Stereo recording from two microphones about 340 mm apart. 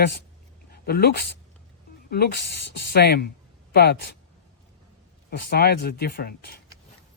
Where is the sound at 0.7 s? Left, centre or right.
Left.